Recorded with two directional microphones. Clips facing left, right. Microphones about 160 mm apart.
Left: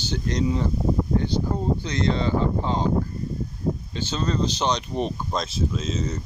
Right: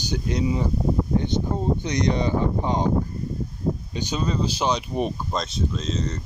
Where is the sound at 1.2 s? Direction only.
20° right (ahead or behind).